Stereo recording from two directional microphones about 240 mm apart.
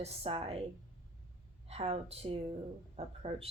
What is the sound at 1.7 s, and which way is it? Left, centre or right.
Speech, right.